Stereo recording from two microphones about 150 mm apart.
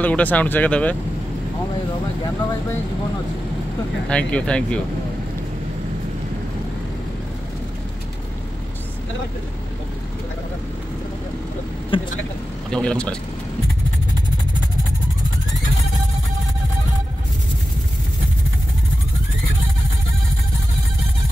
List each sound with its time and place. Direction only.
0.0 s speech: 10° left (ahead or behind)
4.1 s speech: 10° left (ahead or behind)
11.9 s speech: 35° left (ahead or behind)
12.7 s speech: 5° left (ahead or behind)